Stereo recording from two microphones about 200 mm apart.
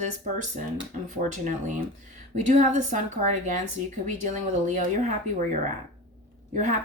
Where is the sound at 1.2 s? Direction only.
40° right (ahead or behind).